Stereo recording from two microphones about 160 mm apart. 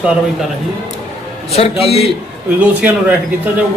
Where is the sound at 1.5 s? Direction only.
40° left (ahead or behind).